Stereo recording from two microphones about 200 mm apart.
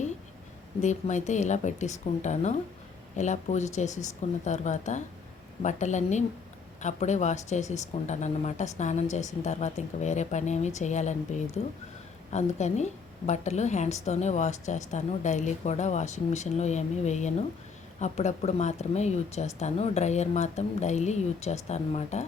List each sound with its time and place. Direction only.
0.8 s a woman's voice: 35° left (ahead or behind)